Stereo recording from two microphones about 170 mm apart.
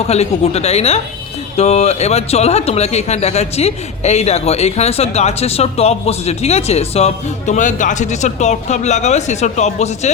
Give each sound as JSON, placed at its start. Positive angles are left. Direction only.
{"t": 0.1, "sound": "a man's voice", "side_deg": 40}